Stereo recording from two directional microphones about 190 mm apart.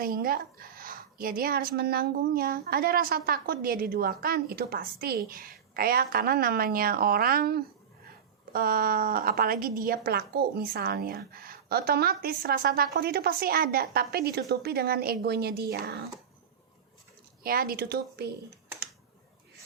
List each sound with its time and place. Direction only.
0.0 s a woman's voice: 50° right (ahead or behind)
17.4 s a woman's voice: 50° right (ahead or behind)